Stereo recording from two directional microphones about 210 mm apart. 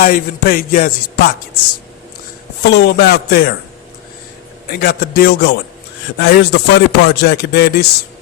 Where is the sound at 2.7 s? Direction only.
50° left (ahead or behind).